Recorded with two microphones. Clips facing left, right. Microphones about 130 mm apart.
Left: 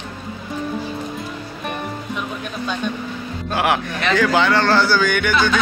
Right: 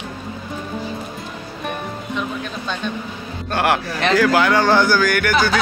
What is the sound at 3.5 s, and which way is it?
Speech, centre (ahead or behind).